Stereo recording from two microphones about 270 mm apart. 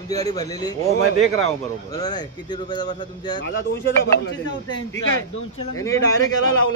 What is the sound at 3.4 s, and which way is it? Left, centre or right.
Speech, left.